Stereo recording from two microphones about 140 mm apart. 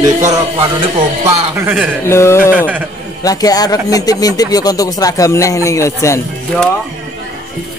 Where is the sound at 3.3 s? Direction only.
25° left (ahead or behind).